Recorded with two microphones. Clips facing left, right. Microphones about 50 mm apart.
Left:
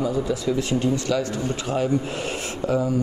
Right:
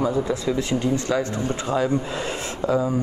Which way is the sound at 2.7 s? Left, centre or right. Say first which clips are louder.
Right 1 dB; right.